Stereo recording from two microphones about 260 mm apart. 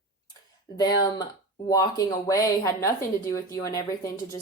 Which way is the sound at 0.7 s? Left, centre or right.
Centre.